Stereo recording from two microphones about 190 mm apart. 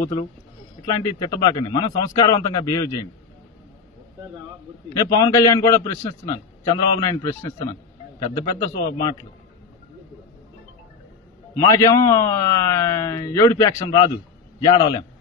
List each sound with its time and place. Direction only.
0.2 s a man's voice: 20° left (ahead or behind)
4.9 s a man's voice: 20° left (ahead or behind)
11.5 s a man's voice: 20° left (ahead or behind)